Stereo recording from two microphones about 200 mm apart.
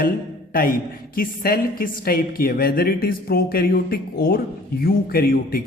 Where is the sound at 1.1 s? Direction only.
45° left (ahead or behind).